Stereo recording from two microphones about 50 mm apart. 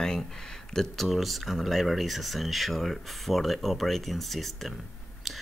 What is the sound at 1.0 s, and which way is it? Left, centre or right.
Speech, centre.